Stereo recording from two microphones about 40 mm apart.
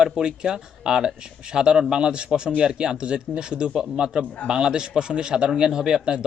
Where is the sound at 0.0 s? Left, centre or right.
Centre.